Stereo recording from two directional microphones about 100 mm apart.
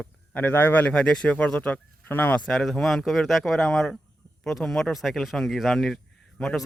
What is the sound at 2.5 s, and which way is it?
A man's voice, 5° left (ahead or behind).